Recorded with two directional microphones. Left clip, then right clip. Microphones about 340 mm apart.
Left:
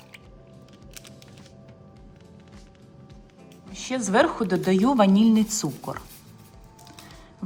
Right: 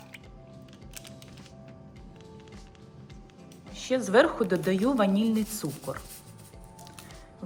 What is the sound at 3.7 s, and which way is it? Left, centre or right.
A woman's voice, centre.